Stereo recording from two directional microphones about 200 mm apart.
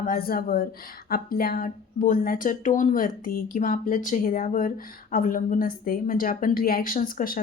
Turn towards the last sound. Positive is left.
turn(degrees=45)  # may be behind; listen again after turning